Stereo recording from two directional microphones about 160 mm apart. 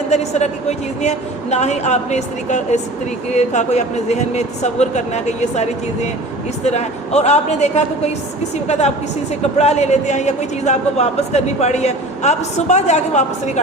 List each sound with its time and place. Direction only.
0.1 s a man's voice: 45° left (ahead or behind)